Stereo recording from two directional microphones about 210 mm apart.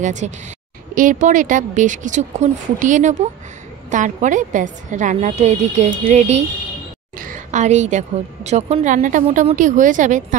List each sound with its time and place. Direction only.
0.0 s a woman's voice: 35° right (ahead or behind)
7.2 s a sound: 40° right (ahead or behind)
8.5 s a woman's voice: 30° right (ahead or behind)